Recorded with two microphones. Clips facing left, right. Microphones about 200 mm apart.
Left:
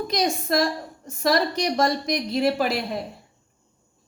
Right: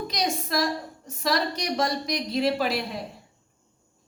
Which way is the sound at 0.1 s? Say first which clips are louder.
Left 6 dB; 50° left (ahead or behind).